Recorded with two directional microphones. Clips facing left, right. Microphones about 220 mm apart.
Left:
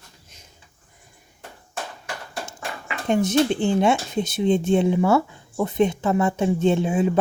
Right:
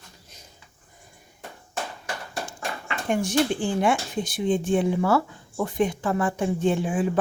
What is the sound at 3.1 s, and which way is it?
Speech, 20° left (ahead or behind).